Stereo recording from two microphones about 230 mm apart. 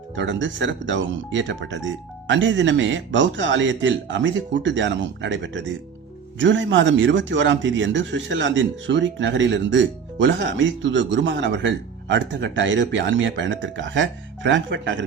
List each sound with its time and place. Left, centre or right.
0.2 s speech: right